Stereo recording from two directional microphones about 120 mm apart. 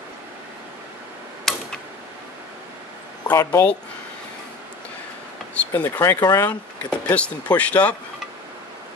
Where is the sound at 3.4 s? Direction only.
20° left (ahead or behind).